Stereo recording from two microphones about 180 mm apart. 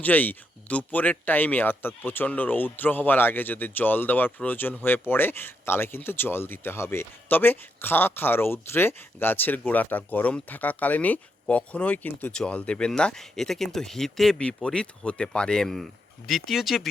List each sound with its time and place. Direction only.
0.0 s speech: 10° left (ahead or behind)